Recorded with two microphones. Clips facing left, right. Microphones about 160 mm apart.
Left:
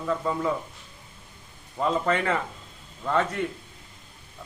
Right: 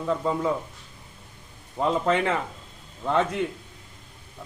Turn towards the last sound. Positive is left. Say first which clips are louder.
# right 2 dB
turn(degrees=-15)  # may be behind; listen again after turning